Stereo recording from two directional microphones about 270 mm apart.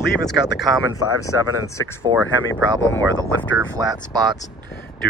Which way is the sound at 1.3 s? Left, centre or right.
Left.